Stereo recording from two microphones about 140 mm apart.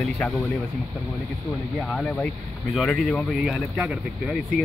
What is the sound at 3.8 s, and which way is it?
Speech, 5° right (ahead or behind).